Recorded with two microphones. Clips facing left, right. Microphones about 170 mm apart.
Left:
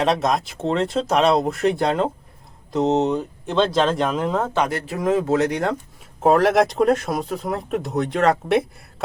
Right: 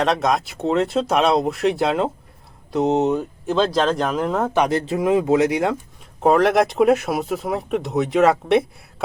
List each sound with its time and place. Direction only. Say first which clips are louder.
0.0 s speech: right 1 dB; centre (ahead or behind)
4.5 s speech: right 4 dB; 20° right (ahead or behind); by 9.0 s centre (ahead or behind)